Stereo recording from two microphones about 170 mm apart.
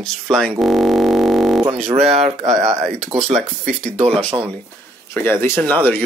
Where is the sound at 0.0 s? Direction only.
5° left (ahead or behind).